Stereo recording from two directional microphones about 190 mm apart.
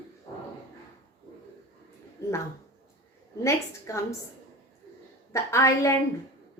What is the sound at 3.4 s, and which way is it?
Speech, 15° left (ahead or behind).